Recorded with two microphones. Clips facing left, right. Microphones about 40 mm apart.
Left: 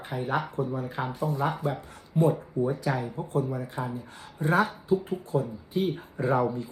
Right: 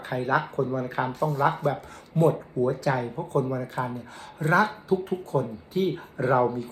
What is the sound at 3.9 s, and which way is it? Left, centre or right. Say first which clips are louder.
Speech: right 1 dB; left.